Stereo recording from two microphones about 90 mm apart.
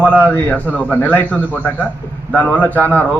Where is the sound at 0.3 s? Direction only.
15° left (ahead or behind).